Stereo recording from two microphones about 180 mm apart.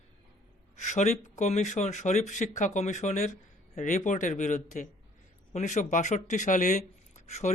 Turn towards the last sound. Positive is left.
turn(degrees=40)  # may be behind; listen again after turning